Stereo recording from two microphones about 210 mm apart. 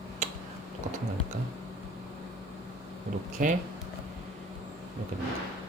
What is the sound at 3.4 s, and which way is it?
Speech, 35° right (ahead or behind).